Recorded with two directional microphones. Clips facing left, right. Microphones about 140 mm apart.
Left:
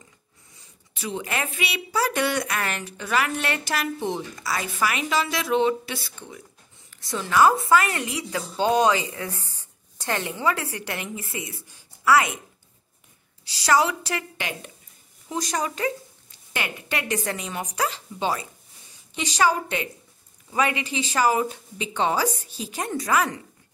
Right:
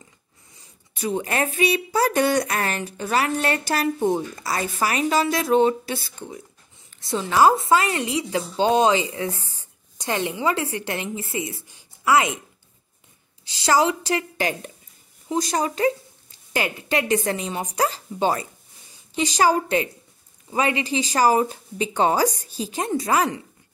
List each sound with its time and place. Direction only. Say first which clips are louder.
0.9 s a woman's voice: right 5 dB; 45° right (ahead or behind)
7.1 s a woman's voice: right 2 dB; 25° right (ahead or behind)
13.5 s a woman's voice: right 2 dB; 25° right (ahead or behind)
17.7 s a woman's voice: right 5 dB; 40° right (ahead or behind)